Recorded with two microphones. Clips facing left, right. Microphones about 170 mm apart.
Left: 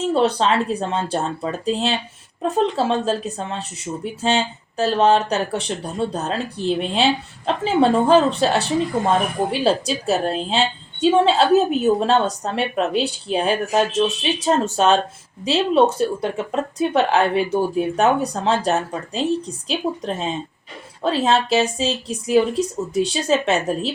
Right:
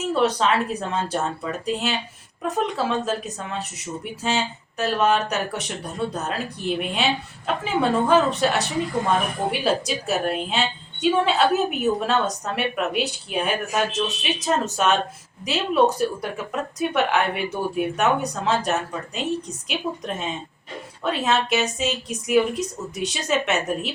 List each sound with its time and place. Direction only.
0.0 s a woman's voice: 30° left (ahead or behind)